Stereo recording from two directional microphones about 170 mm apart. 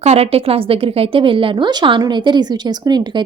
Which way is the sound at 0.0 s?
40° right (ahead or behind).